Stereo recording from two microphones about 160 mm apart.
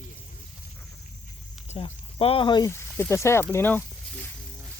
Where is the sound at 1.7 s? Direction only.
35° left (ahead or behind).